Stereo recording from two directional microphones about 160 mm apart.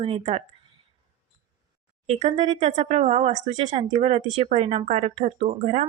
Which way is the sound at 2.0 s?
40° right (ahead or behind).